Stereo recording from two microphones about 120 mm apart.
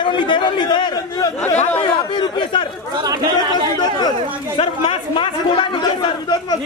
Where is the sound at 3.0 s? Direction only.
30° right (ahead or behind).